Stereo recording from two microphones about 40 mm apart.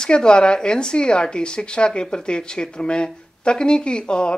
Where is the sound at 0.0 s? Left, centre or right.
Left.